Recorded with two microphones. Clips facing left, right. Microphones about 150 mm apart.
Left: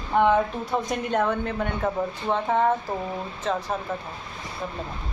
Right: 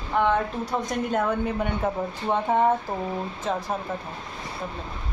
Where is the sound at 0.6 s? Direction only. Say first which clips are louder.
Even; centre (ahead or behind).